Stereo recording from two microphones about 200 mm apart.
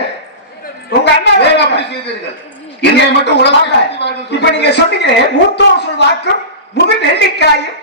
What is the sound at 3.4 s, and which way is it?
Speech, 60° left (ahead or behind).